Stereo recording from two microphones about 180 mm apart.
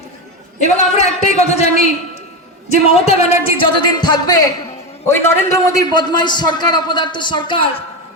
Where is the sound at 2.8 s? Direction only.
35° left (ahead or behind).